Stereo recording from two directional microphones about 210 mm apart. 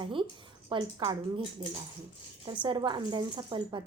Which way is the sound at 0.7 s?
20° right (ahead or behind).